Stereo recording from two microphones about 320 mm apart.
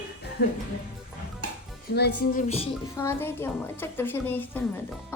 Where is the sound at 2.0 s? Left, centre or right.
Left.